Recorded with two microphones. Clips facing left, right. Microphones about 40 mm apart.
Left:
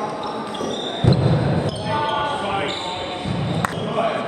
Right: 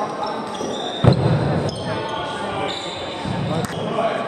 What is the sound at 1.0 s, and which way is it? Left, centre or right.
Basketball bounce, right.